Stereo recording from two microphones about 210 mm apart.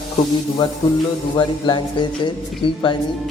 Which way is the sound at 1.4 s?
20° left (ahead or behind).